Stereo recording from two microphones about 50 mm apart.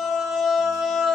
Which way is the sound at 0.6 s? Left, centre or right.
Centre.